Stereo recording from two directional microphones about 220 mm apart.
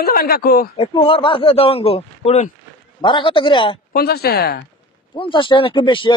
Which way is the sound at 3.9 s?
45° left (ahead or behind).